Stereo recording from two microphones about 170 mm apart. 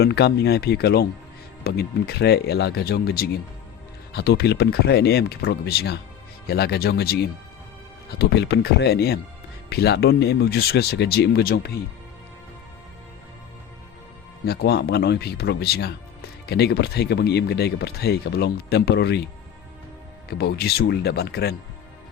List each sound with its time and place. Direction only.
0.0 s speech: 70° left (ahead or behind)
8.2 s speech: 75° left (ahead or behind)
14.4 s speech: 70° left (ahead or behind)